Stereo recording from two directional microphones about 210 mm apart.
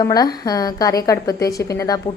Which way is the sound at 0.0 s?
20° left (ahead or behind).